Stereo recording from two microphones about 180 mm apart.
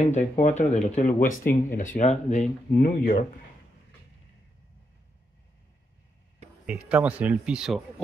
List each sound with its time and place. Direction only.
0.0 s speech: 40° left (ahead or behind)
2.8 s speech: 50° left (ahead or behind)
6.6 s speech: 10° right (ahead or behind)